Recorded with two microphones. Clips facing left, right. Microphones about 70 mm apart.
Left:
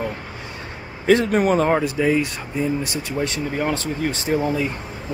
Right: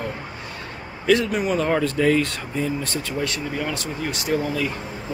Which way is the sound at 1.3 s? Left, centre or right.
Left.